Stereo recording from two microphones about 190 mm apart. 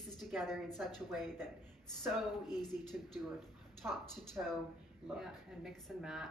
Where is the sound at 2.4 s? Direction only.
20° left (ahead or behind).